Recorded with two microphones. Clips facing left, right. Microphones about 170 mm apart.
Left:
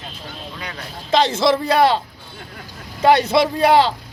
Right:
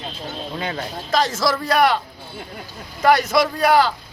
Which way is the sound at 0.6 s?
25° right (ahead or behind).